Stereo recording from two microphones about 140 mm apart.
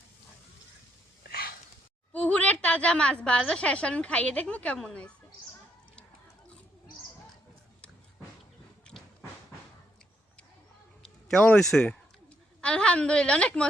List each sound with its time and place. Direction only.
1.2 s a sound: 90° left
2.1 s a woman's voice: 10° left (ahead or behind)
11.3 s a woman's voice: 10° left (ahead or behind)